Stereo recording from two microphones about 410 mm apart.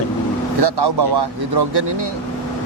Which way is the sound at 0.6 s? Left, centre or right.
Right.